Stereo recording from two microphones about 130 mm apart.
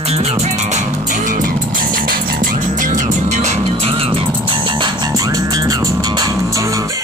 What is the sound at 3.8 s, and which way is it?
Music, 45° right (ahead or behind).